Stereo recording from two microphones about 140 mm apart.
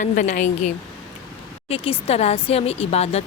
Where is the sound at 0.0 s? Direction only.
60° left (ahead or behind).